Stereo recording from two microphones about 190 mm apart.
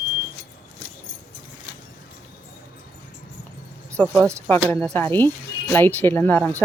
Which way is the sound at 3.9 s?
10° left (ahead or behind).